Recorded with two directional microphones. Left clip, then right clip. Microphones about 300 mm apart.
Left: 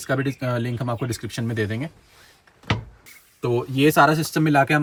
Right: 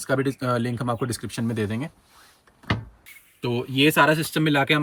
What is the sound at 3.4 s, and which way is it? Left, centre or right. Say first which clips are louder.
Speech: left 4 dB; left.